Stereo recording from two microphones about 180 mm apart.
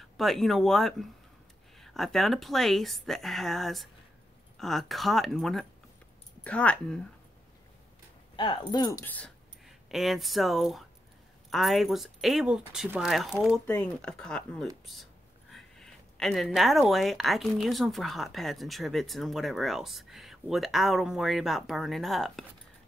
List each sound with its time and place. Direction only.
0.0 s speech: centre (ahead or behind)
8.4 s speech: 25° left (ahead or behind)
9.0 s speech: 5° left (ahead or behind)